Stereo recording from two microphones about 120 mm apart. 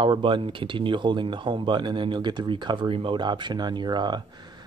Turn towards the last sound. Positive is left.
turn(degrees=-35)  # may be behind; listen again after turning